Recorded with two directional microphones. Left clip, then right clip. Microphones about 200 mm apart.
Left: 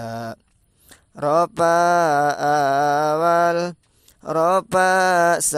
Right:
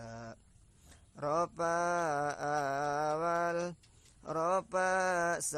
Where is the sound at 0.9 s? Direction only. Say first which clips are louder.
Left 15 dB; 35° left (ahead or behind).